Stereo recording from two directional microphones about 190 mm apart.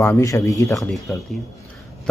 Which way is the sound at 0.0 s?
15° left (ahead or behind).